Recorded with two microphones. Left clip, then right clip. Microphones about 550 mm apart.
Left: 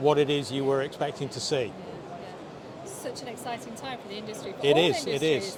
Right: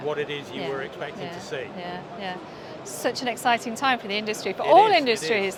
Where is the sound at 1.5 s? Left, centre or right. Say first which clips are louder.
Left 5 dB; left.